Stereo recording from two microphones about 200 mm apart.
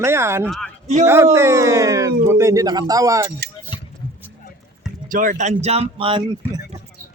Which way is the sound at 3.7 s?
25° left (ahead or behind).